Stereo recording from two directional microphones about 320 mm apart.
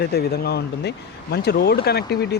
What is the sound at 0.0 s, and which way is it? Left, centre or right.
Speech, left.